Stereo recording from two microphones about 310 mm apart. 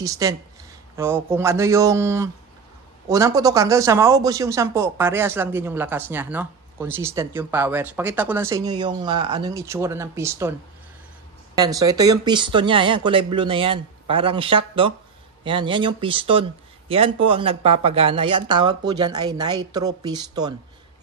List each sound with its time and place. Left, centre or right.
0.0 s speech: centre
11.5 s speech: centre